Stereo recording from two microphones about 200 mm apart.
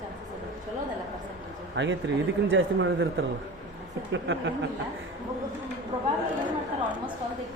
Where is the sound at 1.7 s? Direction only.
65° right (ahead or behind).